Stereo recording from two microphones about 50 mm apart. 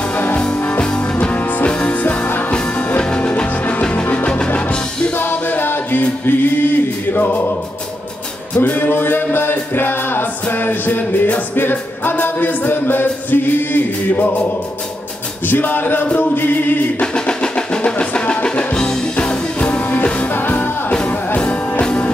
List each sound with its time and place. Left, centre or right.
0.6 s music: left
5.1 s music: left
8.5 s music: left
15.4 s music: left
17.0 s music: centre
20.3 s music: left
20.9 s music: centre